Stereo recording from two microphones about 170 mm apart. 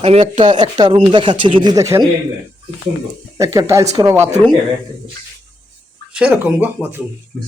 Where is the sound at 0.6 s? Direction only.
25° right (ahead or behind).